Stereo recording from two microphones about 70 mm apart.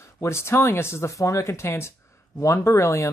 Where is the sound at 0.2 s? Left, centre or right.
Left.